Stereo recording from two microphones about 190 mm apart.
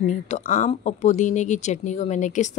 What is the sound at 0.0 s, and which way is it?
Speech, 40° left (ahead or behind).